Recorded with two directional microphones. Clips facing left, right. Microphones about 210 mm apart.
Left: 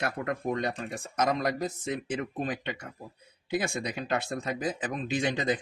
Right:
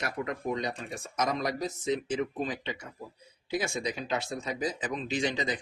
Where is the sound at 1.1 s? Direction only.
55° left (ahead or behind).